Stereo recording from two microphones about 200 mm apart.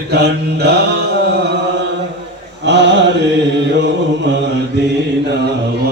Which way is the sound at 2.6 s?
60° right (ahead or behind).